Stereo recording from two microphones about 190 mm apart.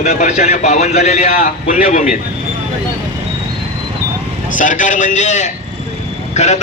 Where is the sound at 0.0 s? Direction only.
35° left (ahead or behind).